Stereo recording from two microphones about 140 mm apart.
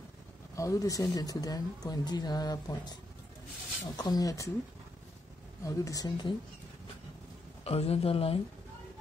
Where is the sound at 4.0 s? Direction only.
30° left (ahead or behind).